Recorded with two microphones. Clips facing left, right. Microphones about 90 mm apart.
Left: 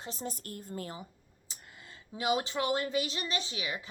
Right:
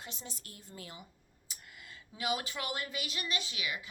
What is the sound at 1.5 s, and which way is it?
Speech, 30° left (ahead or behind).